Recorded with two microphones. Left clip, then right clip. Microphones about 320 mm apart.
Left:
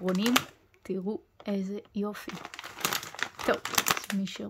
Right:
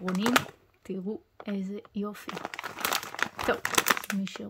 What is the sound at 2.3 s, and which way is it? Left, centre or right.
Crumpling, centre.